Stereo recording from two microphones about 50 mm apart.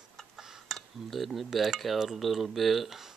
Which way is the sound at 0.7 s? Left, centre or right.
Centre.